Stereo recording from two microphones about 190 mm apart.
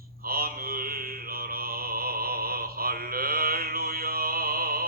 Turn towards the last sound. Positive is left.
turn(degrees=-50)  # may be behind; listen again after turning